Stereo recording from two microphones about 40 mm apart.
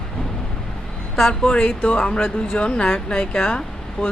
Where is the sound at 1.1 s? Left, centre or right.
Centre.